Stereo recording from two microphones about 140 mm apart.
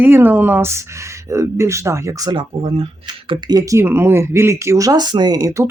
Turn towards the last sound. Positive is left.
turn(degrees=-25)  # may be behind; listen again after turning